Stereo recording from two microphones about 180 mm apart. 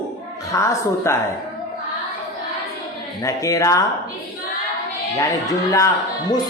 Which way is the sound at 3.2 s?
20° left (ahead or behind).